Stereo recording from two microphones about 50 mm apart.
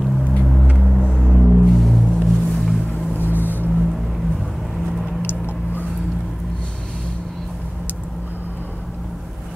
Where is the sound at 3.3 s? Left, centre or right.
Left.